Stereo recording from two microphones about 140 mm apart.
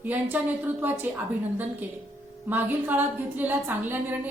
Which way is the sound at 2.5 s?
10° right (ahead or behind).